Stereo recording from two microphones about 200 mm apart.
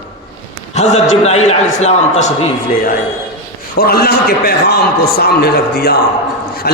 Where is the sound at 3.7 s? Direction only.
50° left (ahead or behind).